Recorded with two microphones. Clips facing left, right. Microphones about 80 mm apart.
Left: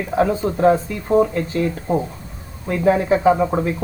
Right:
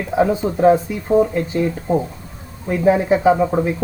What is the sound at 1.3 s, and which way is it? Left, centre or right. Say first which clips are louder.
Speech: right 2 dB; centre.